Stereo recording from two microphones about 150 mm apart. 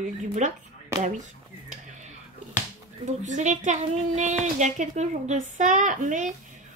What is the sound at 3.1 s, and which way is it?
A woman's voice, 50° right (ahead or behind).